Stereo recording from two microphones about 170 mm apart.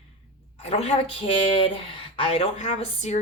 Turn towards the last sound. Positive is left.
turn(degrees=40)  # may be behind; listen again after turning